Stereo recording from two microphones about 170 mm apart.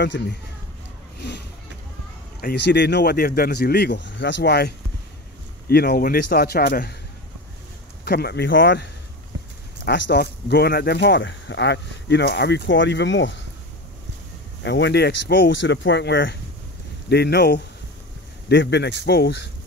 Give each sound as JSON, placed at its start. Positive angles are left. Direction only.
{"t": 0.0, "sound": "speech", "side_deg": 90}
{"t": 2.4, "sound": "speech", "side_deg": 85}
{"t": 8.0, "sound": "speech", "side_deg": 70}
{"t": 9.8, "sound": "speech", "side_deg": 85}
{"t": 14.6, "sound": "speech", "side_deg": 90}
{"t": 18.5, "sound": "speech", "side_deg": 90}